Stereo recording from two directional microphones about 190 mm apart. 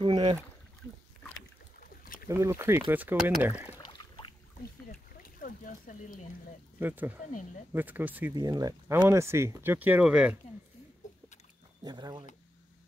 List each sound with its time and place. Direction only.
0.0 s speech: 25° right (ahead or behind)
2.2 s speech: 15° right (ahead or behind)
5.4 s a sound: 45° left (ahead or behind)
6.8 s speech: 10° right (ahead or behind)
8.4 s speech: 20° right (ahead or behind)
11.8 s a sound: 20° right (ahead or behind)